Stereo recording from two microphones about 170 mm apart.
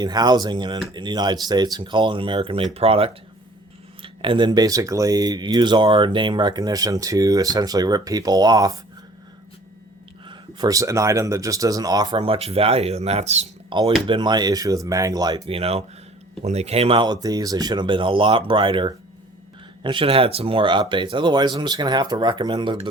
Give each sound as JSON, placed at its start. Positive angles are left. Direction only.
{"t": 0.0, "sound": "speech", "side_deg": -25}
{"t": 10.2, "sound": "speech", "side_deg": -20}
{"t": 13.7, "sound": "speech", "side_deg": -30}
{"t": 15.4, "sound": "speech", "side_deg": -35}